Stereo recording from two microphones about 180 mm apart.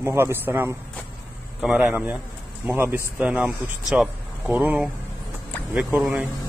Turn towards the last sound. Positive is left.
turn(degrees=-5)  # may be behind; listen again after turning